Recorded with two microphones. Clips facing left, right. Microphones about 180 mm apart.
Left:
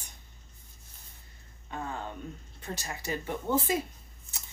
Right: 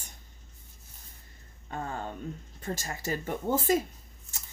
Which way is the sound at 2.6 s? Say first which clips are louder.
Right 2 dB; 45° right (ahead or behind).